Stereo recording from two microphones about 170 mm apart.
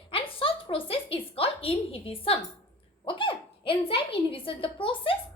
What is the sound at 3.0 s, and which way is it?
A woman's voice, 30° left (ahead or behind).